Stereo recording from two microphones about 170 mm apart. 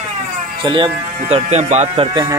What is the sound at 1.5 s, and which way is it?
Speech, 40° right (ahead or behind).